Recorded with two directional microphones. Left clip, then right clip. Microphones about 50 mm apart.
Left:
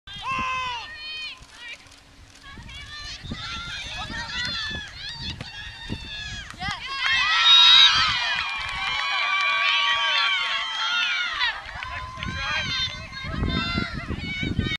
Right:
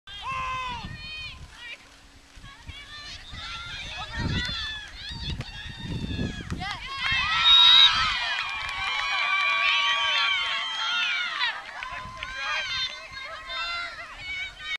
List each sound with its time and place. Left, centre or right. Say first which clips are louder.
0.3 s run: left 4 dB; left
3.4 s run: left 3 dB; left
5.9 s run: even; left
8.7 s run: left 1 dB; centre
14.2 s a sound: left 3 dB; centre